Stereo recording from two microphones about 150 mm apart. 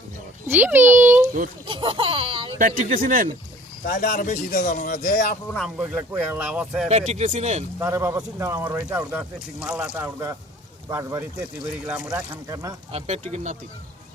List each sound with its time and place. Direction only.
0.4 s a child's voice: 15° right (ahead or behind)
1.6 s speech: 35° right (ahead or behind)
3.0 s speech: 65° right (ahead or behind)
3.8 s speech: 60° left (ahead or behind)
5.5 s speech: 5° right (ahead or behind)
6.8 s speech: 45° right (ahead or behind)
7.8 s a man's voice: 20° right (ahead or behind)
9.6 s a man's voice: 5° right (ahead or behind); by 11.3 s 20° right (ahead or behind)
11.9 s speech: centre (ahead or behind)
12.1 s a man's voice: 25° right (ahead or behind)
12.9 s speech: 45° right (ahead or behind)